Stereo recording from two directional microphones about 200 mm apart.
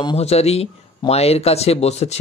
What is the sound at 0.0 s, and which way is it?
Speech, 30° left (ahead or behind).